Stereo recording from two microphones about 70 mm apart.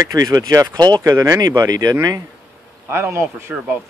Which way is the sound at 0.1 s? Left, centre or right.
Right.